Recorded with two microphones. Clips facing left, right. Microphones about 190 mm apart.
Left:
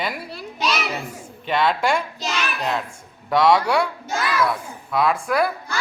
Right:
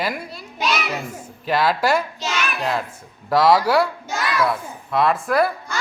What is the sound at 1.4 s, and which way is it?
A woman's voice, 5° right (ahead or behind).